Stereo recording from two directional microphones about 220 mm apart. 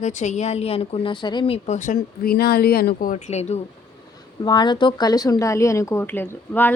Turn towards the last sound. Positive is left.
turn(degrees=10)  # may be behind; listen again after turning